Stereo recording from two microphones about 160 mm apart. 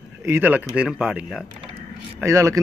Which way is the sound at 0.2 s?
15° right (ahead or behind).